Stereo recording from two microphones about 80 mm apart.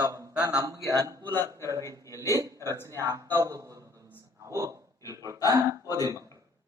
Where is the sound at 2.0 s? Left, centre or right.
Left.